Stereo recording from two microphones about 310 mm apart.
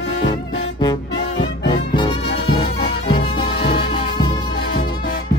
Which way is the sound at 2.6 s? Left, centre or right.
Left.